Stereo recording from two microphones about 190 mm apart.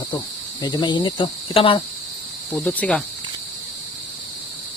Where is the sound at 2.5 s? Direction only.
10° left (ahead or behind).